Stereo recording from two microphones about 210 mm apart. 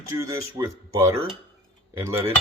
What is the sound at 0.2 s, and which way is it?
Speech, 15° right (ahead or behind).